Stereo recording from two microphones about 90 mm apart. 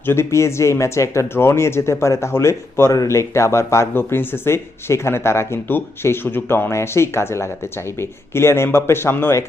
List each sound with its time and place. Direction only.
0.0 s speech: 30° left (ahead or behind)